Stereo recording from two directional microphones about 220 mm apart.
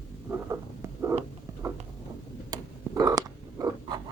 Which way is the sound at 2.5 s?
15° right (ahead or behind).